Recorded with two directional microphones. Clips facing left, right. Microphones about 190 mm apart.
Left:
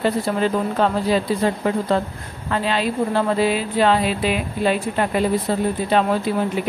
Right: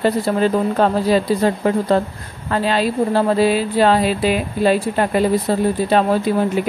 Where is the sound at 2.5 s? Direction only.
40° right (ahead or behind).